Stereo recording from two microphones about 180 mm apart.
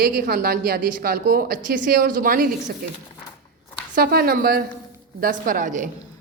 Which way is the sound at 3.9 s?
55° right (ahead or behind).